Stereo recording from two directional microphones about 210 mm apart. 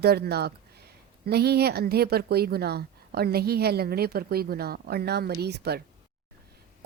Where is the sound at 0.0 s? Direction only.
50° right (ahead or behind).